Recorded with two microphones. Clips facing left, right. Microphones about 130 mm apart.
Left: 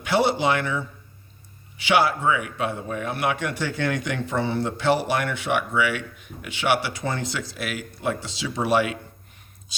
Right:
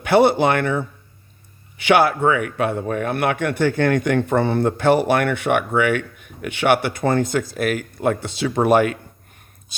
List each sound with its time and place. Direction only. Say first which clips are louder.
0.0 s a man's voice: right 6 dB; 55° right (ahead or behind)